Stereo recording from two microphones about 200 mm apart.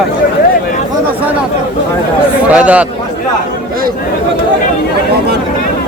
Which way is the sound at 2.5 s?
5° right (ahead or behind).